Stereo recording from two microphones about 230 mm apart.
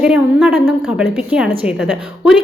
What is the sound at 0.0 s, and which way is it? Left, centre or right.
A woman's voice, centre.